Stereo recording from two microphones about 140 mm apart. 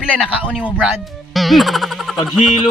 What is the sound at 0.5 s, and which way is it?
Speech, 5° right (ahead or behind).